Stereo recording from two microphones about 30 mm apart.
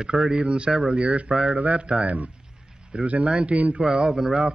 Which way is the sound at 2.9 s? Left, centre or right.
Right.